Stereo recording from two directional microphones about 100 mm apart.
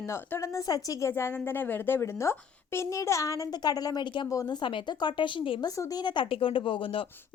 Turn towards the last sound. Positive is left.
turn(degrees=60)  # may be behind; listen again after turning